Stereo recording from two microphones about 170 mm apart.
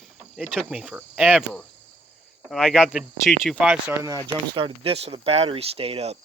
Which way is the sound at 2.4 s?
Centre (ahead or behind).